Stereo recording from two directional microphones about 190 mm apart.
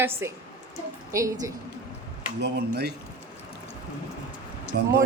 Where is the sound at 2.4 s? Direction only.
60° right (ahead or behind).